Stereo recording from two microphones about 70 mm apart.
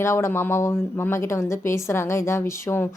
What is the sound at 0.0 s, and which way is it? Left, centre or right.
Speech, left.